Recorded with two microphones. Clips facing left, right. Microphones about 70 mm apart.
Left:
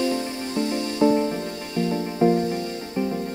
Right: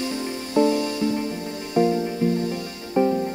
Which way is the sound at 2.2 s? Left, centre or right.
Left.